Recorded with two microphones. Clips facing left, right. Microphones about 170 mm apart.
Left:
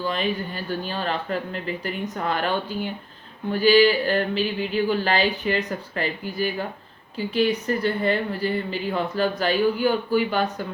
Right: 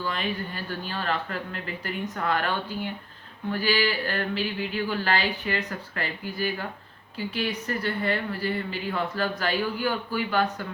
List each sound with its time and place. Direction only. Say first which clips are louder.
0.0 s speech: left 5 dB; 20° left (ahead or behind)